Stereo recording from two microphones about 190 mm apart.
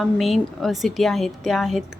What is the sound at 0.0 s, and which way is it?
A woman's voice, centre (ahead or behind).